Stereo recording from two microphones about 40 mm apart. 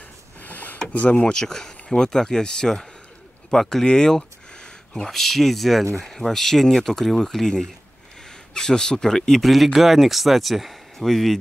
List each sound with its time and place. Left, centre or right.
0.4 s a sound: left
1.2 s speech: centre
9.5 s speech: centre